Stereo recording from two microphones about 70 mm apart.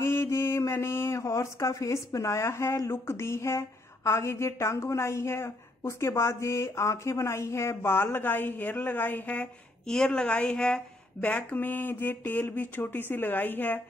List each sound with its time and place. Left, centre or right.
0.0 s speech: left
9.8 s speech: centre; by 13.7 s left